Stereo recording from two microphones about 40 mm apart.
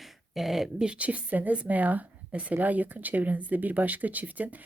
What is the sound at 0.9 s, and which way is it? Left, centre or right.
Speech, right.